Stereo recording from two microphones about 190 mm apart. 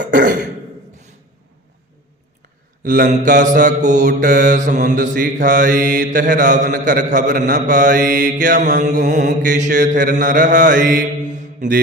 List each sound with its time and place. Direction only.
0.0 s throat clearing: 45° right (ahead or behind)
2.8 s mantra: 45° right (ahead or behind)